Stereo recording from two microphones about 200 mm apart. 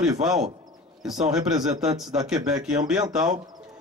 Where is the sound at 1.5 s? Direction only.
Centre (ahead or behind).